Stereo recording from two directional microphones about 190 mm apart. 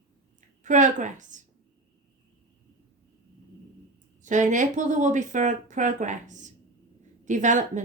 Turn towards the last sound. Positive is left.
turn(degrees=-40)  # may be behind; listen again after turning